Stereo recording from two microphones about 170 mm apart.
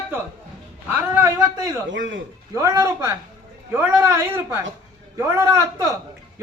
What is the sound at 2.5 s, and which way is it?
A man's voice, 20° right (ahead or behind).